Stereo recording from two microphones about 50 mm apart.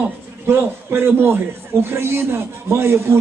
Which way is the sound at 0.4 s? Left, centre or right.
Right.